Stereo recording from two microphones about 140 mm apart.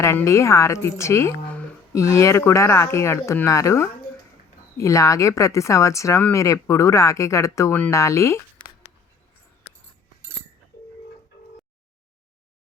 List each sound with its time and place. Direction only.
0.0 s speech: 20° left (ahead or behind)